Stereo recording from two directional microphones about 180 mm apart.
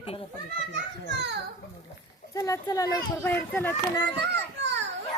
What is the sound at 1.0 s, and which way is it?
Children playing, 70° right (ahead or behind).